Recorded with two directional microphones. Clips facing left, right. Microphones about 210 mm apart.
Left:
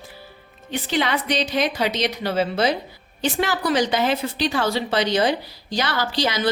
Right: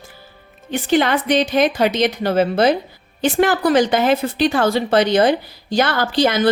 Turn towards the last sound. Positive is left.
turn(degrees=-50)  # may be behind; listen again after turning